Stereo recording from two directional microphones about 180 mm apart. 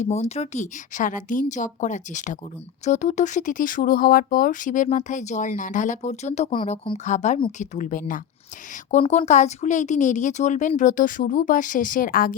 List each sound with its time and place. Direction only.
0.0 s speech: 35° left (ahead or behind)
6.9 s speech: 40° left (ahead or behind)